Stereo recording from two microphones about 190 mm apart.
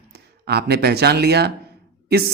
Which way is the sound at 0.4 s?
60° right (ahead or behind).